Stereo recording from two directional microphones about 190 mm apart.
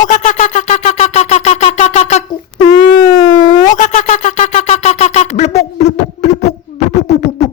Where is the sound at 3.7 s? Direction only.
40° left (ahead or behind).